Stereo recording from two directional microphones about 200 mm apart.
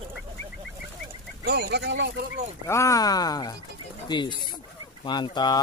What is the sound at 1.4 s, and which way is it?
Speech, 50° right (ahead or behind).